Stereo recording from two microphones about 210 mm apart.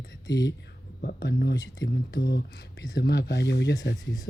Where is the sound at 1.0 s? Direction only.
50° left (ahead or behind).